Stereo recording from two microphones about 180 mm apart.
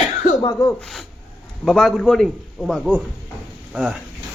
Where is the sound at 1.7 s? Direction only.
Centre (ahead or behind).